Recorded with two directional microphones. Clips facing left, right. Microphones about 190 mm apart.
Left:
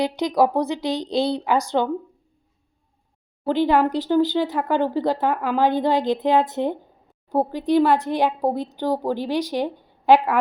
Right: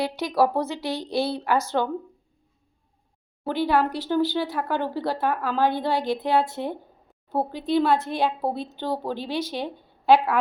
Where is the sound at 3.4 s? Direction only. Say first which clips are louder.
Left 4 dB; 15° left (ahead or behind).